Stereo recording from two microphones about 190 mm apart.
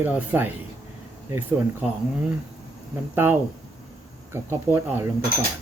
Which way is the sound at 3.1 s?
10° right (ahead or behind).